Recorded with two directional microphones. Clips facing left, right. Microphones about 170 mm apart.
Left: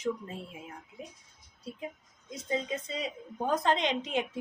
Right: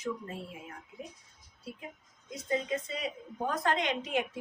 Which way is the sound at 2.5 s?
20° left (ahead or behind).